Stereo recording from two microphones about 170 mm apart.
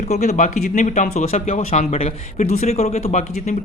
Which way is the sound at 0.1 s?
40° left (ahead or behind).